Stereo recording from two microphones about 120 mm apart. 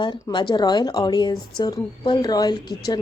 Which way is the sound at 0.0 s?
40° left (ahead or behind).